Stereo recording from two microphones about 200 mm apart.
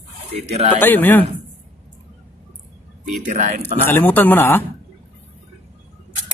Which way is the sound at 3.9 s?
10° left (ahead or behind).